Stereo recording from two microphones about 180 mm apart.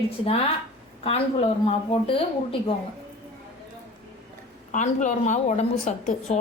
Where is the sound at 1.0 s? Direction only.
35° left (ahead or behind).